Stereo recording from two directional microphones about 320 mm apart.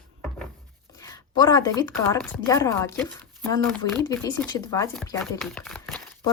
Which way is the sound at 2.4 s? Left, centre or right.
Centre.